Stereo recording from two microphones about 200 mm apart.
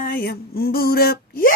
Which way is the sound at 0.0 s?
50° left (ahead or behind).